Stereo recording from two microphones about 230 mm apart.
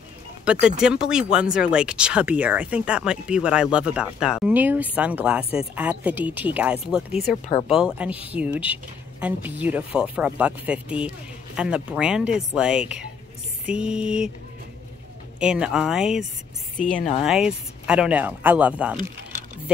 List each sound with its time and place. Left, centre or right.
0.5 s speech: centre
15.3 s speech: centre
16.9 s speech: left
17.2 s speech: centre